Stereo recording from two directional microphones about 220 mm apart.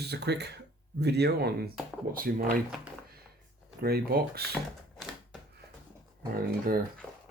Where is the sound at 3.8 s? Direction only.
45° right (ahead or behind).